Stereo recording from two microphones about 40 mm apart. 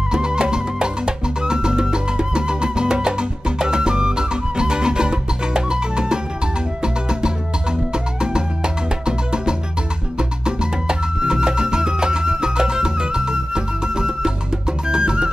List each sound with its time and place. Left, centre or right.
0.1 s music: centre